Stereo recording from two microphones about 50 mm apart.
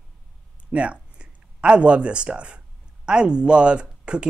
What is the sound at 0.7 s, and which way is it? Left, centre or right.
Speech, right.